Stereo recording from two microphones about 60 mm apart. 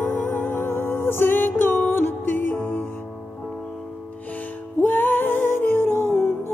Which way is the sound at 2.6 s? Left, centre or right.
Left.